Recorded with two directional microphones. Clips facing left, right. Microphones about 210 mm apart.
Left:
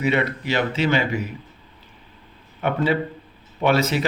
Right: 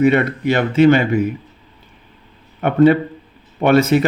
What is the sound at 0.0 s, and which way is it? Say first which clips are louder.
Speech: right 8 dB; 50° right (ahead or behind).